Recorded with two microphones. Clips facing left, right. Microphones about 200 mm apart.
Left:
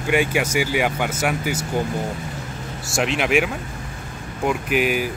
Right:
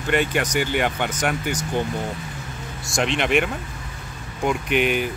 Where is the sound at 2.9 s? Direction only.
5° left (ahead or behind).